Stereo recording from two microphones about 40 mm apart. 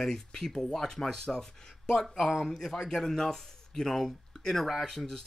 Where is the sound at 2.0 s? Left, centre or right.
Centre.